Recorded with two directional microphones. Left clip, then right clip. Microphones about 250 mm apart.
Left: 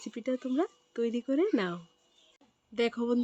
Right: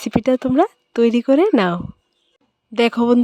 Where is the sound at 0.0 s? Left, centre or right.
Right.